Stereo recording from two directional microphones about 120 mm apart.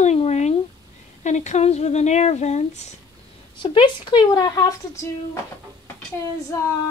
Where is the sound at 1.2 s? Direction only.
80° left.